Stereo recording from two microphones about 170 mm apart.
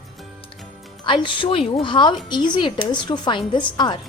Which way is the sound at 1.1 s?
30° left (ahead or behind).